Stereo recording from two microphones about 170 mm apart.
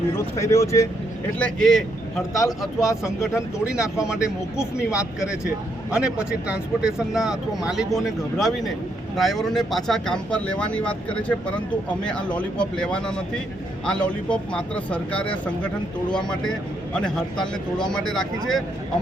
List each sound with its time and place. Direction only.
0.3 s speech: 20° left (ahead or behind)
1.4 s speech: 5° left (ahead or behind)
2.8 s speech: 15° left (ahead or behind)
3.6 s speech: 5° right (ahead or behind)